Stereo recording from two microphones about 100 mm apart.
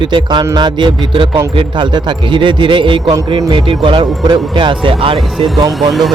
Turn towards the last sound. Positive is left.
turn(degrees=-40)  # may be behind; listen again after turning